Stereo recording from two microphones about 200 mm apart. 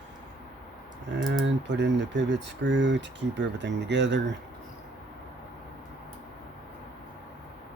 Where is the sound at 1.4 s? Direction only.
60° right (ahead or behind).